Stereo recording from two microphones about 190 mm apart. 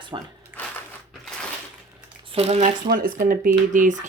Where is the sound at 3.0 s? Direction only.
50° right (ahead or behind).